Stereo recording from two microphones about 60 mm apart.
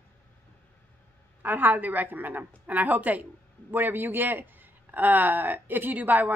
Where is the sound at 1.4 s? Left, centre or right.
Right.